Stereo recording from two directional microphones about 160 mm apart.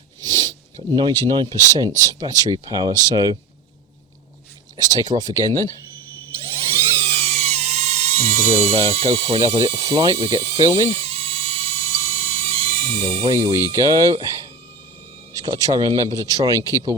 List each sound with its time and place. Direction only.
0.2 s a sound: 25° right (ahead or behind)
1.3 s speech: 25° right (ahead or behind)
4.8 s speech: 25° right (ahead or behind)
6.4 s dental drill: 35° right (ahead or behind)
13.3 s speech: 20° right (ahead or behind)